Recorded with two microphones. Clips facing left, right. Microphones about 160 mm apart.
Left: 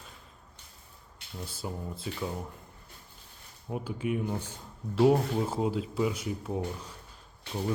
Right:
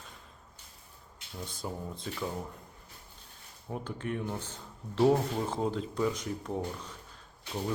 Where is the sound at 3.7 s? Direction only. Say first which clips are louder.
Left 4 dB; 10° left (ahead or behind).